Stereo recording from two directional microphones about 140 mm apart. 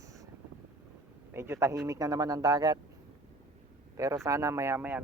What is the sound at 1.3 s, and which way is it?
Speech, 20° right (ahead or behind).